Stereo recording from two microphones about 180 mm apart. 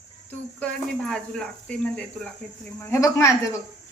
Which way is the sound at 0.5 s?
5° left (ahead or behind).